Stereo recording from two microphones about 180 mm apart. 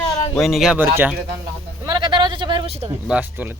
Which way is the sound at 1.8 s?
25° right (ahead or behind).